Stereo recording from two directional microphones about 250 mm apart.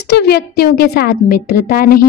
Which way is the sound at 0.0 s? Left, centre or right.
Left.